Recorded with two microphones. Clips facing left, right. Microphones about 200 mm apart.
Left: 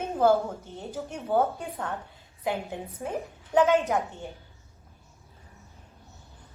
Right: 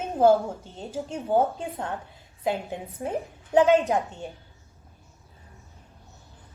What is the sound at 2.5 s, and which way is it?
Speech, 15° right (ahead or behind).